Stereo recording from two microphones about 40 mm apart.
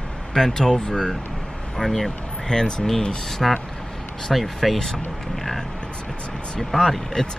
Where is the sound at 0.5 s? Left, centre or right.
Centre.